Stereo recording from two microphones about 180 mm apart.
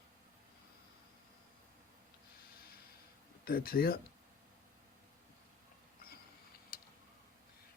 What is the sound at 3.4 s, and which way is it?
Speech, 55° left (ahead or behind).